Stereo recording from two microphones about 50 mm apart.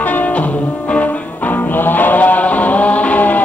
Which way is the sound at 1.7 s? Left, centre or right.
Left.